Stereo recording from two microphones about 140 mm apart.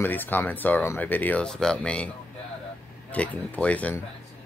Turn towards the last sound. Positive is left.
turn(degrees=10)  # may be behind; listen again after turning